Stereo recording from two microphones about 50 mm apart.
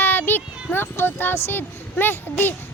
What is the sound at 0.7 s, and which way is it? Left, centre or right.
A child's voice, left.